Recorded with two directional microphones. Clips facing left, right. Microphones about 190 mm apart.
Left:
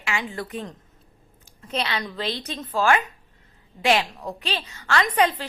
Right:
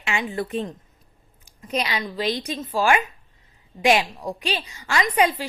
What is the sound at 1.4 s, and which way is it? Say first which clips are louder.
A woman's voice: right 2 dB; 10° right (ahead or behind).